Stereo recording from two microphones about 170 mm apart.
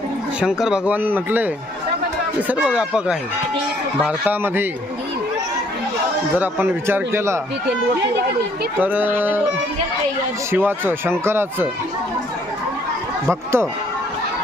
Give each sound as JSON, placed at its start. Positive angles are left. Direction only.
{"t": 0.3, "sound": "speech", "side_deg": -5}
{"t": 2.5, "sound": "speech", "side_deg": -5}
{"t": 6.3, "sound": "speech", "side_deg": -10}
{"t": 8.8, "sound": "speech", "side_deg": -10}
{"t": 10.5, "sound": "speech", "side_deg": -10}
{"t": 13.2, "sound": "speech", "side_deg": -15}